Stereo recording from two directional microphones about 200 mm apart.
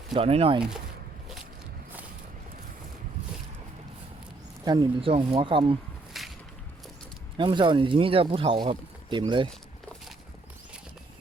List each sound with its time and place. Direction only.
0.1 s speech: 30° right (ahead or behind)
4.6 s speech: 20° right (ahead or behind)
6.1 s a sound: centre (ahead or behind)
7.3 s speech: 25° right (ahead or behind)